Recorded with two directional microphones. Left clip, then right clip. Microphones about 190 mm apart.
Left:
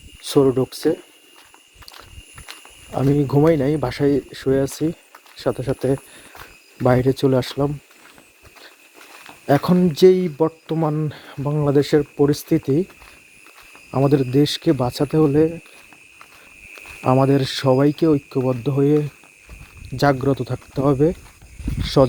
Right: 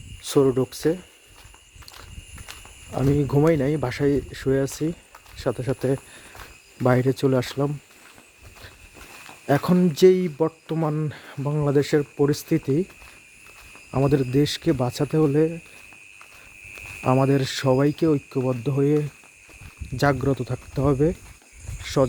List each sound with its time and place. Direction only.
0.3 s speech: centre (ahead or behind)
2.5 s a sound: 35° left (ahead or behind)
2.9 s speech: 5° left (ahead or behind)
9.5 s speech: centre (ahead or behind)
13.9 s speech: 5° left (ahead or behind)
17.0 s speech: 5° left (ahead or behind)
20.0 s speech: 5° left (ahead or behind)